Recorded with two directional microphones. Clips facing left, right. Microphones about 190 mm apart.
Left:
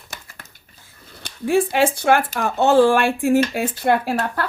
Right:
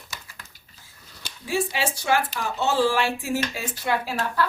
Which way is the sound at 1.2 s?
55° left (ahead or behind).